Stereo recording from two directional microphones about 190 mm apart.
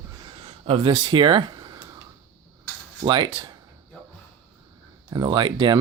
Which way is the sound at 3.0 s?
25° right (ahead or behind).